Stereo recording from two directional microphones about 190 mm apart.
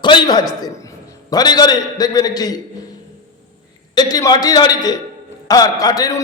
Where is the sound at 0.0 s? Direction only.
25° left (ahead or behind).